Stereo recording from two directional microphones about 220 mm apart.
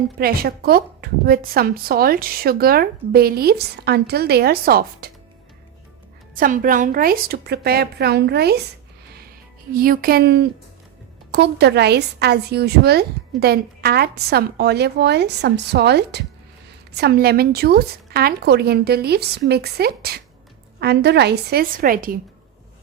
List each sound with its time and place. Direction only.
0.2 s a woman's voice: 45° right (ahead or behind)
6.3 s a woman's voice: 40° right (ahead or behind)
9.7 s a woman's voice: 40° right (ahead or behind)